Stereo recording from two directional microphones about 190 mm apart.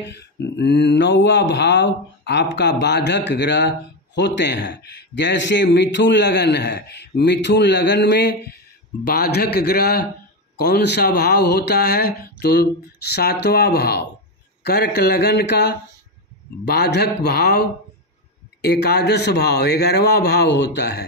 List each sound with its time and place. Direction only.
0.1 s speech: 65° left (ahead or behind)